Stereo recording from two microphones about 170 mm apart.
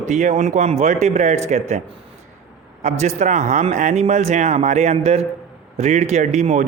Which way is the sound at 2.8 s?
40° right (ahead or behind).